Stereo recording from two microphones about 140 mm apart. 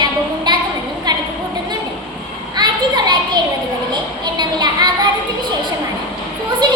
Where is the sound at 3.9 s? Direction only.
30° right (ahead or behind).